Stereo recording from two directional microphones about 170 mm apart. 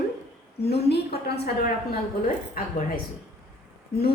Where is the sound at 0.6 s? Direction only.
75° left (ahead or behind).